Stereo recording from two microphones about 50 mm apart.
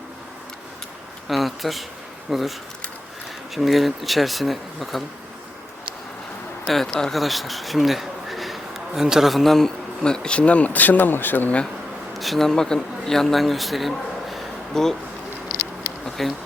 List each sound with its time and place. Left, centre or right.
1.3 s speech: centre
3.5 s speech: centre
6.7 s speech: centre
9.3 s speech: centre; by 11.5 s left
12.1 s speech: centre
16.0 s a sound: centre